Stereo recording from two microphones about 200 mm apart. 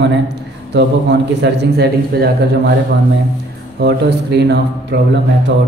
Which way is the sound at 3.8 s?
55° right (ahead or behind).